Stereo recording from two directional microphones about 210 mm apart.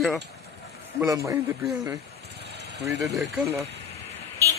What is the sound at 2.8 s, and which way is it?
Speech, 55° right (ahead or behind).